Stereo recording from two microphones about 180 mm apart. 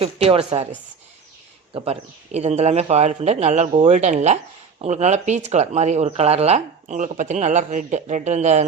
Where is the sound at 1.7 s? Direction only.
35° right (ahead or behind).